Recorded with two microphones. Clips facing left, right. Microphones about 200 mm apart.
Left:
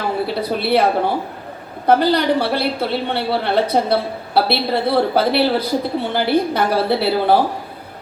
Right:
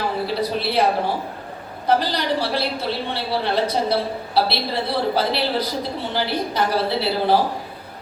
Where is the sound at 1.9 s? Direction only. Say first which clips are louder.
Left 6 dB; 60° left (ahead or behind).